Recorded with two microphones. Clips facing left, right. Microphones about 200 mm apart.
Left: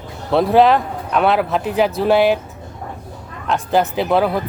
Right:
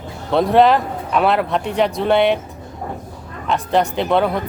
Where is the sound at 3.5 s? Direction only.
Centre (ahead or behind).